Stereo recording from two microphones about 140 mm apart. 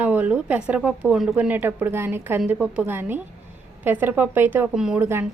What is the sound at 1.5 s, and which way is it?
A woman's voice, 15° right (ahead or behind).